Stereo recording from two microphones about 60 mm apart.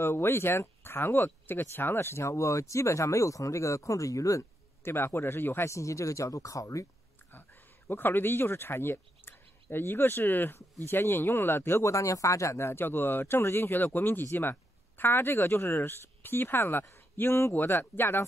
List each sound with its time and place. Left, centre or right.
0.0 s speech: left
4.8 s speech: left
5.7 s speech: left
7.9 s speech: left
11.8 s speech: left
13.7 s speech: left